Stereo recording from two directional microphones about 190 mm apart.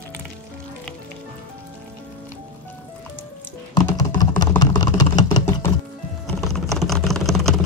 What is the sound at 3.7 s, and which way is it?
Computer keyboard, 20° left (ahead or behind).